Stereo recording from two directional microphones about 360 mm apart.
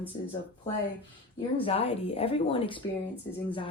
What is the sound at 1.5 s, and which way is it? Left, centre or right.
Speech, centre.